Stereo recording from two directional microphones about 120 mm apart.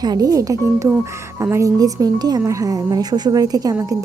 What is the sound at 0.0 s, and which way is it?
A woman's voice, 30° right (ahead or behind).